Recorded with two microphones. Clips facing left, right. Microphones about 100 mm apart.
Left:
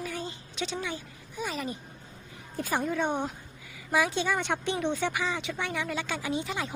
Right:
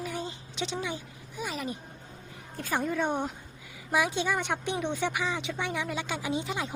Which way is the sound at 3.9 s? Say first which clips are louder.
Left 1 dB; 15° right (ahead or behind).